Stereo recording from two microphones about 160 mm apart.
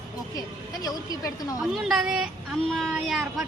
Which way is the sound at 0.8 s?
20° left (ahead or behind).